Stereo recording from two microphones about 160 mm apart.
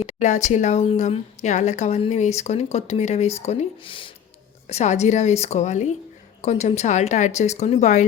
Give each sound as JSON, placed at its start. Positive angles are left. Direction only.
{"t": 0.0, "sound": "a woman's voice", "side_deg": 45}
{"t": 4.7, "sound": "a woman's voice", "side_deg": 45}